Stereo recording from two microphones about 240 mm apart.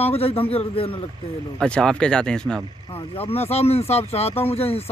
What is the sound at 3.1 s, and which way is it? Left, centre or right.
Speech, left.